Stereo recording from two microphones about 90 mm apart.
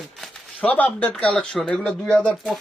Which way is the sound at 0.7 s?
15° left (ahead or behind).